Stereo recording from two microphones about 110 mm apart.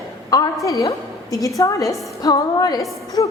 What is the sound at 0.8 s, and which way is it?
A woman's voice, 30° left (ahead or behind).